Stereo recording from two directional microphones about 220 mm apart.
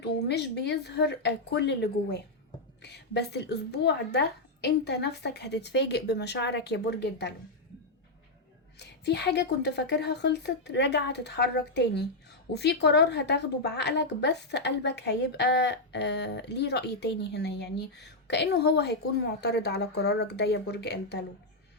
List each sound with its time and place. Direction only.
0.0 s a woman's voice: 50° left (ahead or behind)
8.8 s a woman's voice: 50° left (ahead or behind)